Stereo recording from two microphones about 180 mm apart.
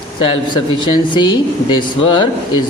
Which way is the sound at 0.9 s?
25° left (ahead or behind).